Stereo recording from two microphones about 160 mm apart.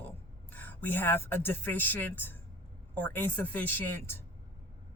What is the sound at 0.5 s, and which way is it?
Speech, 10° left (ahead or behind).